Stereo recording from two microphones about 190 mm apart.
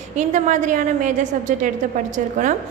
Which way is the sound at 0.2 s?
40° right (ahead or behind).